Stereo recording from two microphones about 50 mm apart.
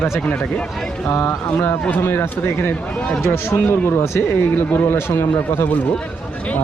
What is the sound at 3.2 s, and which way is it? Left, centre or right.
Speech, left.